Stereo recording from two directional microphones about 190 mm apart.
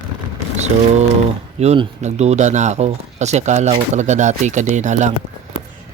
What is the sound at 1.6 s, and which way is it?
Speech, 35° right (ahead or behind).